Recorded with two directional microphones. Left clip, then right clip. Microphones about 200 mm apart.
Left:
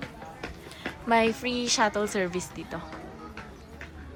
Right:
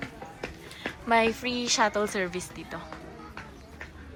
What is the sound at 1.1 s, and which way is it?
A woman's voice, 10° left (ahead or behind).